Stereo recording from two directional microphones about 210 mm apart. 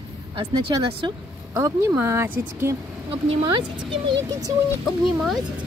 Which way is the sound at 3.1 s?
25° right (ahead or behind).